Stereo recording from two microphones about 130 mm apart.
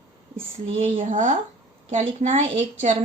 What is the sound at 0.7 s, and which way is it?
Speech, 75° right (ahead or behind).